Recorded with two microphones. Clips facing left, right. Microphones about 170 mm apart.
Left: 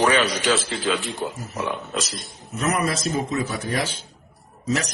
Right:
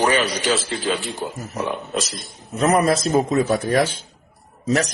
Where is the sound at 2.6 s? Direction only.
40° right (ahead or behind).